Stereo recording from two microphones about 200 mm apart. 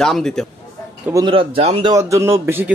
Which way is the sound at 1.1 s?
25° right (ahead or behind).